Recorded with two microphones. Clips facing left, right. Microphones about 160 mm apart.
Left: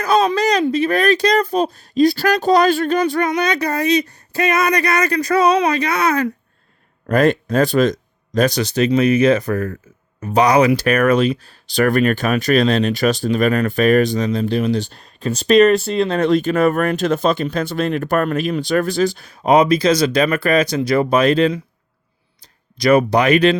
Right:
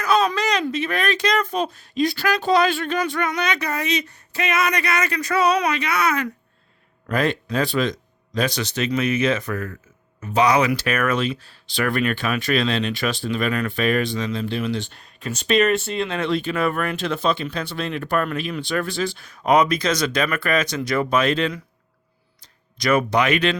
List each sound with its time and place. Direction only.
0.0 s a sound: 35° left (ahead or behind)
0.6 s speech: 35° left (ahead or behind)
7.1 s speech: 45° left (ahead or behind)
22.8 s speech: 35° left (ahead or behind)